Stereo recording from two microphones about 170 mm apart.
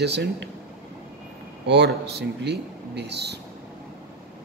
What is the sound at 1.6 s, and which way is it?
Speech, 90° right.